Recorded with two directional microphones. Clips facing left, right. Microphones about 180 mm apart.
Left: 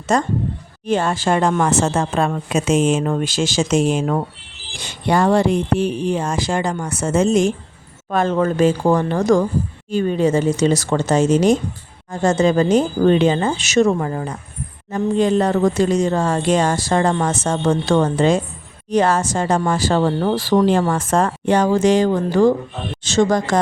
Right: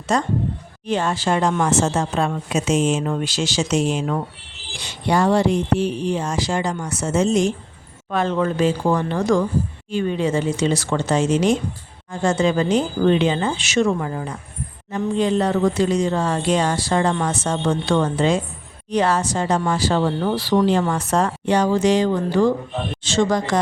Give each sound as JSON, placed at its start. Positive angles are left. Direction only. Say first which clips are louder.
{"t": 0.1, "sound": "speech", "louder": "left 2 dB", "side_deg": 45}